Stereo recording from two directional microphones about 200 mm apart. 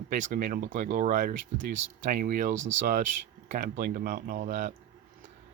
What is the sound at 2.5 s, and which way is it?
Speech, 70° right (ahead or behind).